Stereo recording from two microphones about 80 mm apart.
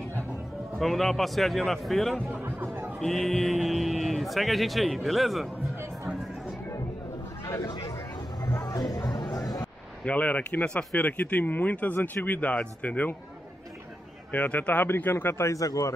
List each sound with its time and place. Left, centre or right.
0.7 s speech: centre
2.3 s music: right
3.0 s speech: centre
8.5 s music: left
9.0 s chatter: left
10.0 s speech: centre
14.3 s speech: centre; by 15.9 s left